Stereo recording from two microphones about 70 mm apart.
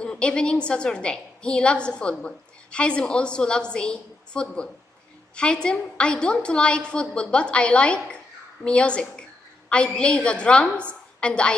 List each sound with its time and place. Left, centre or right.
0.0 s a woman's voice: centre